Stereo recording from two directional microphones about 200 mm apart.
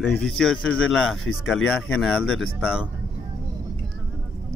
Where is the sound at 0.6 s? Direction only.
75° left (ahead or behind).